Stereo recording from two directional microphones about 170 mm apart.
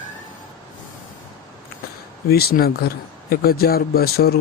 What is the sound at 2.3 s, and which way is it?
Speech, 65° left (ahead or behind).